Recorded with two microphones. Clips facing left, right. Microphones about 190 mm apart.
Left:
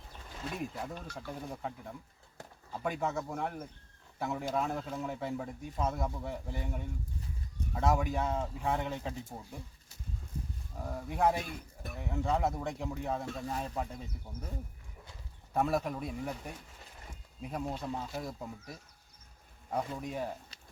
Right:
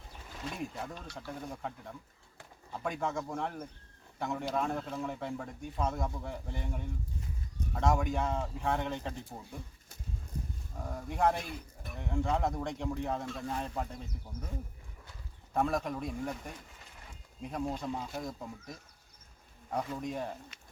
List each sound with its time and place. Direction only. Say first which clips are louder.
0.5 s speech: left 2 dB; 5° left (ahead or behind)
10.8 s speech: even; 5° left (ahead or behind)
15.5 s speech: even; 5° left (ahead or behind)
20.5 s a sound: even; 35° left (ahead or behind)